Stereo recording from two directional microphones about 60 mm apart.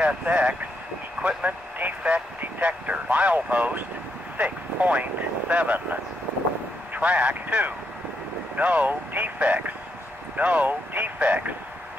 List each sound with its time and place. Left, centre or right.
0.0 s speech: right
7.0 s speech: right